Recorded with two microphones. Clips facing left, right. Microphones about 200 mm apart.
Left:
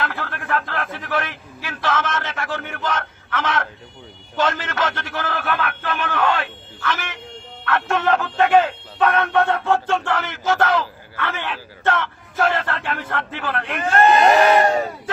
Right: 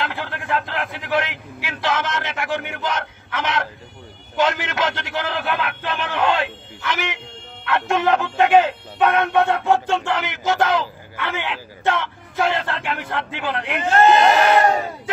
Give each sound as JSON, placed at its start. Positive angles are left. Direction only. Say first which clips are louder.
{"t": 0.0, "sound": "speech", "louder": "even", "side_deg": -20}